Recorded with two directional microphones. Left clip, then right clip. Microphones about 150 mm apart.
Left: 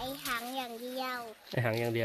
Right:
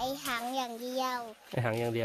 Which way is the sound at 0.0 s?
60° right (ahead or behind).